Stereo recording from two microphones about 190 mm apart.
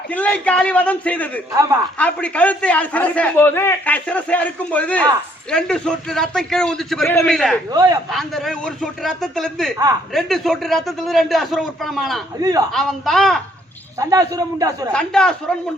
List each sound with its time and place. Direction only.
0.1 s a man's voice: 5° left (ahead or behind)
7.7 s a man's voice: 20° right (ahead or behind)
8.1 s a man's voice: centre (ahead or behind)
12.4 s a man's voice: 20° right (ahead or behind)
12.7 s a man's voice: centre (ahead or behind)
14.0 s a man's voice: 20° right (ahead or behind)
14.9 s a man's voice: 5° left (ahead or behind)